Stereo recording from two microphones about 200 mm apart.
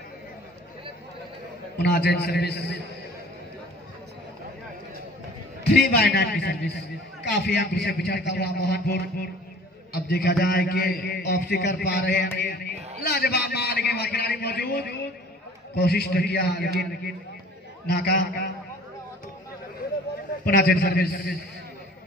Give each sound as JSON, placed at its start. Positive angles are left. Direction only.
{"t": 1.8, "sound": "a man's voice", "side_deg": 55}
{"t": 5.7, "sound": "a man's voice", "side_deg": 55}
{"t": 20.4, "sound": "a man's voice", "side_deg": 45}